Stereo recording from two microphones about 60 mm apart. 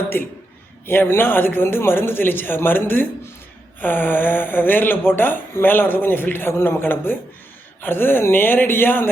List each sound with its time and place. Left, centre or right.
0.1 s speech: left